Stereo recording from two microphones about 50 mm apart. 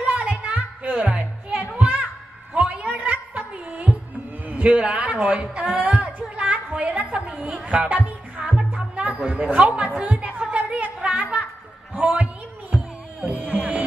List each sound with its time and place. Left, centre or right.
0.0 s music: right
2.5 s a sound: right
9.2 s a man's voice: right
10.1 s music: right
11.9 s a sound: right
13.2 s music: right